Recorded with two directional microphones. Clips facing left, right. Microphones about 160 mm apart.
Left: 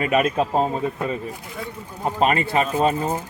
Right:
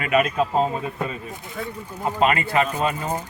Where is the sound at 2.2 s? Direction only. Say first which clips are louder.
Even; 35° left (ahead or behind).